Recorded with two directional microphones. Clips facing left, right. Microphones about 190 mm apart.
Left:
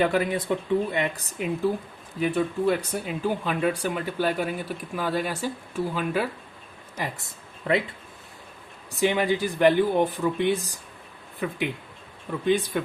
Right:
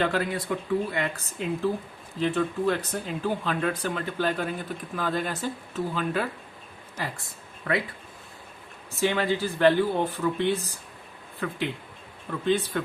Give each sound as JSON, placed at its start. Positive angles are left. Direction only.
{"t": 0.0, "sound": "speech", "side_deg": 15}
{"t": 8.9, "sound": "speech", "side_deg": 15}